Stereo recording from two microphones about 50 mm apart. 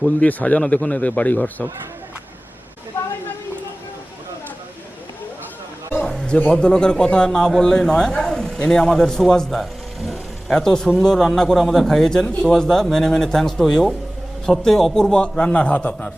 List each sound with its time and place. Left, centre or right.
0.2 s a man's voice: left
6.1 s a sound: centre
6.5 s a man's voice: centre
10.1 s a sound: centre
11.0 s a man's voice: centre
15.1 s a man's voice: centre